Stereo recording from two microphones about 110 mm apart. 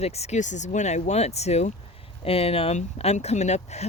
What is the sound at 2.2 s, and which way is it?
Speech, 60° left (ahead or behind).